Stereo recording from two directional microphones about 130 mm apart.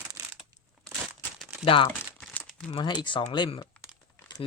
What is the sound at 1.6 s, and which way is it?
Speech, 40° left (ahead or behind).